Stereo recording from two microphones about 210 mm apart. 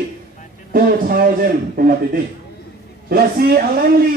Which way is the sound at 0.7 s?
45° right (ahead or behind).